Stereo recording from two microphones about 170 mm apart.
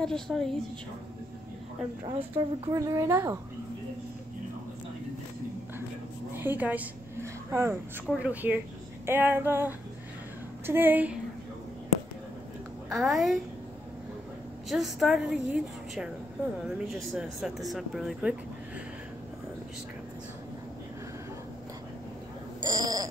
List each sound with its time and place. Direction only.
0.0 s speech: 5° left (ahead or behind)
2.0 s speech: 30° right (ahead or behind)
2.7 s female singing: 15° right (ahead or behind)
6.3 s a sound: 10° right (ahead or behind)
8.2 s female singing: 10° right (ahead or behind)
12.9 s speech: centre (ahead or behind)
14.7 s speech: centre (ahead or behind)
22.6 s owl: 25° right (ahead or behind)